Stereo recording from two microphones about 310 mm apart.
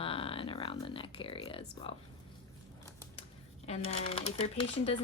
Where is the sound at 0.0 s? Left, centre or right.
Centre.